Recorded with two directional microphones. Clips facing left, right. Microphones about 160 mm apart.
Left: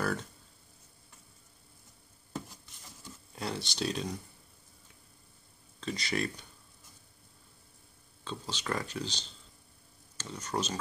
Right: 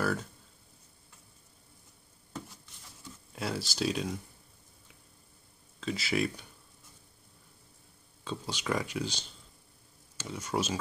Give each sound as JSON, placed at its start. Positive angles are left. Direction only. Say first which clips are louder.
{"t": 0.0, "sound": "speech", "louder": "right 2 dB", "side_deg": -5}
{"t": 3.3, "sound": "speech", "louder": "right 2 dB", "side_deg": -5}
{"t": 5.8, "sound": "speech", "louder": "right 3 dB", "side_deg": -5}
{"t": 8.2, "sound": "speech", "louder": "right 2 dB", "side_deg": -10}